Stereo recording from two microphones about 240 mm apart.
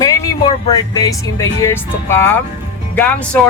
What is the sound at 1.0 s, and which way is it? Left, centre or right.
Speech, centre.